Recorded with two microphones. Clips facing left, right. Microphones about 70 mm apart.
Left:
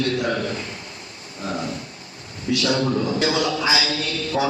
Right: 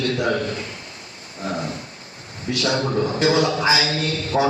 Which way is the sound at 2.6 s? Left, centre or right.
Right.